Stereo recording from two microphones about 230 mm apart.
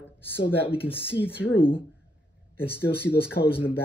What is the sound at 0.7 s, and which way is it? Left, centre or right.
Speech, left.